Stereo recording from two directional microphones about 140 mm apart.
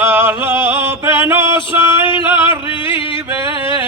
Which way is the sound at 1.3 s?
20° right (ahead or behind).